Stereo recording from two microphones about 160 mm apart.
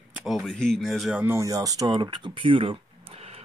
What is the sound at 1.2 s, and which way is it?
Speech, 20° right (ahead or behind).